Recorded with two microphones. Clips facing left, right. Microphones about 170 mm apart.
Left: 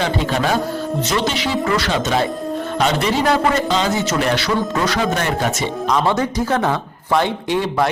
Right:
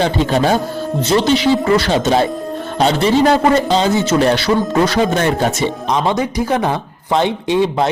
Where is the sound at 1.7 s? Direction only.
30° right (ahead or behind).